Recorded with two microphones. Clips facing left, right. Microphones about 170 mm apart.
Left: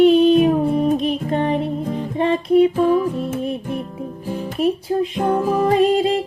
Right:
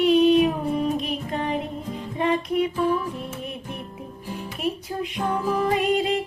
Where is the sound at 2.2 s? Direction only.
30° left (ahead or behind).